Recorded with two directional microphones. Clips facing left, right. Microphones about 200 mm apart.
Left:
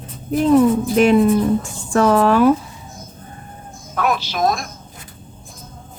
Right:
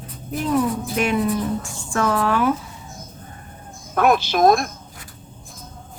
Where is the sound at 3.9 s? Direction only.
50° right (ahead or behind).